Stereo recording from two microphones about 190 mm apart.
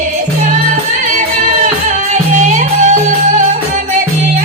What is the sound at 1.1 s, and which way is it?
Music, 40° right (ahead or behind).